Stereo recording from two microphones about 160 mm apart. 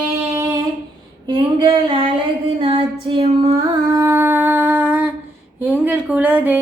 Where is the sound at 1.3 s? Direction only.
30° right (ahead or behind).